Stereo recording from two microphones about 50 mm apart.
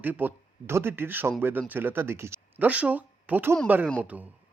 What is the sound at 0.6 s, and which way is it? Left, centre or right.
Speech, right.